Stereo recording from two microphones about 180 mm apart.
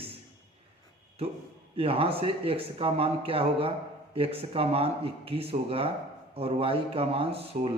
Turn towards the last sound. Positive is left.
turn(degrees=-35)  # may be behind; listen again after turning